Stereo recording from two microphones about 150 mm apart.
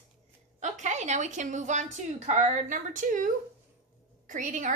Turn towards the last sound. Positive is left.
turn(degrees=-60)  # may be behind; listen again after turning